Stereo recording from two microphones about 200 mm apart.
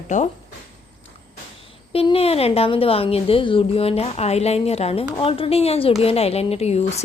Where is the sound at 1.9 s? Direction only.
30° left (ahead or behind).